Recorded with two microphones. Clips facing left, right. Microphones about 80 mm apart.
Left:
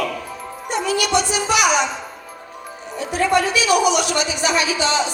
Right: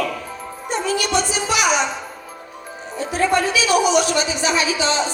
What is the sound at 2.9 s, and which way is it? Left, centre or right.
Speech, right.